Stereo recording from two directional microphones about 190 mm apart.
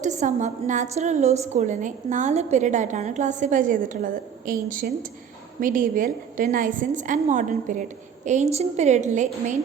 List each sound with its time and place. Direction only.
0.0 s a woman's voice: 40° right (ahead or behind)